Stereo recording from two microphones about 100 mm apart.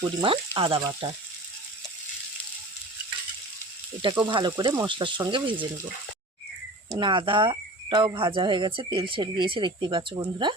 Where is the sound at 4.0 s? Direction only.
50° right (ahead or behind).